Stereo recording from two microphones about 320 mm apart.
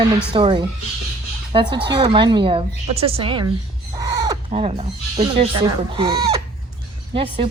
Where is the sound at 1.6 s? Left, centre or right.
Centre.